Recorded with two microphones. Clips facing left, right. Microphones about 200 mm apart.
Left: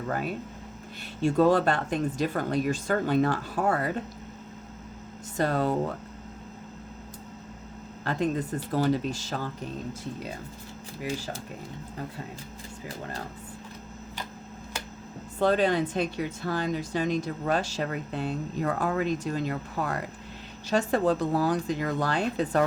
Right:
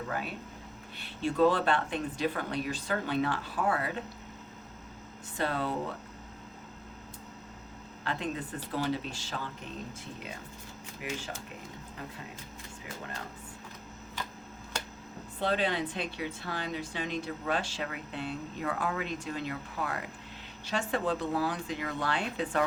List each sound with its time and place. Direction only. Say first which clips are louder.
0.1 s speech: left 6 dB; 45° left (ahead or behind)
5.4 s speech: left 6 dB; 45° left (ahead or behind)
8.0 s speech: left 7 dB; 40° left (ahead or behind)
11.0 s speech: left 5 dB; 35° left (ahead or behind)
15.4 s speech: left 7 dB; 45° left (ahead or behind)